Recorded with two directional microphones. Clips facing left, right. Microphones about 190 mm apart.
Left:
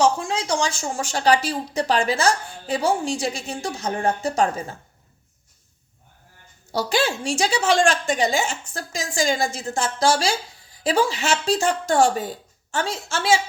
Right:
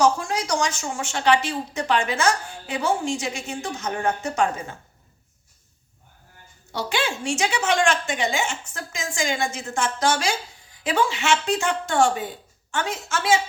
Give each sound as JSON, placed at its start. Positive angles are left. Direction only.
{"t": 0.0, "sound": "a woman's voice", "side_deg": 25}
{"t": 6.7, "sound": "a woman's voice", "side_deg": 35}